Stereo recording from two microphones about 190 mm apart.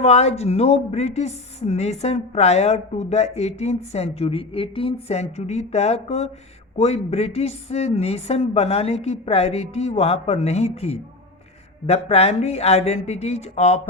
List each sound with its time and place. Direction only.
0.0 s a woman's voice: 35° left (ahead or behind)